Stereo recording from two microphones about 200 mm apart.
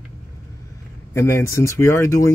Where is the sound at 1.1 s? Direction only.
15° left (ahead or behind).